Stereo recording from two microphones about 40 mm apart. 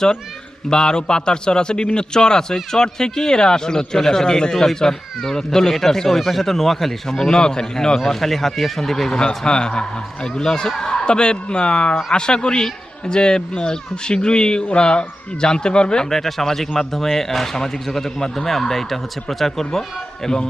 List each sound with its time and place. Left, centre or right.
0.7 s a man's voice: centre
9.1 s a man's voice: left
16.0 s a man's voice: centre